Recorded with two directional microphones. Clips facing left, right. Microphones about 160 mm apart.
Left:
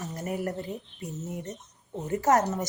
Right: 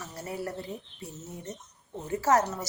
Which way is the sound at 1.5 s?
20° left (ahead or behind).